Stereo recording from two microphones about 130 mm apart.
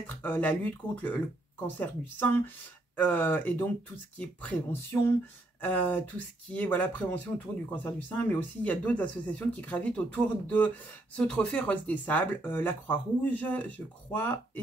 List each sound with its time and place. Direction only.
0.0 s speech: 15° left (ahead or behind)